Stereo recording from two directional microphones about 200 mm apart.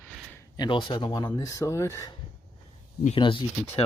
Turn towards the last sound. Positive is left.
turn(degrees=25)  # may be behind; listen again after turning